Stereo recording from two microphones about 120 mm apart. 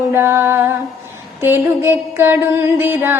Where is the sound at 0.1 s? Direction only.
20° right (ahead or behind).